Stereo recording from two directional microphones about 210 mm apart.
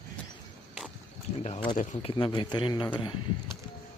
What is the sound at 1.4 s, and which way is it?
A man's voice, 25° left (ahead or behind).